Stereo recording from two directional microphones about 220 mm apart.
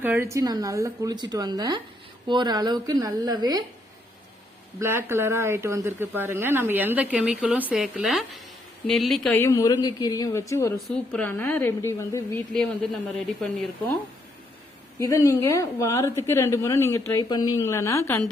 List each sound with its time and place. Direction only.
0.0 s a woman's voice: 10° right (ahead or behind)
4.8 s a woman's voice: 10° right (ahead or behind); by 10.8 s 15° left (ahead or behind)
10.8 s a woman's voice: centre (ahead or behind)
13.4 s speech: 5° left (ahead or behind)
14.9 s a woman's voice: 15° left (ahead or behind)